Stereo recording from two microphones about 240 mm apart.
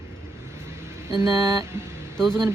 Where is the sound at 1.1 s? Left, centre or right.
Centre.